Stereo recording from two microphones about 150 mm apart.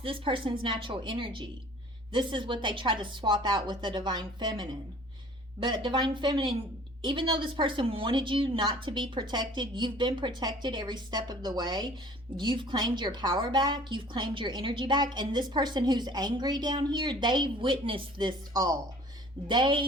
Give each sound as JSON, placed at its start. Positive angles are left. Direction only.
{"t": 0.0, "sound": "a woman's voice", "side_deg": -35}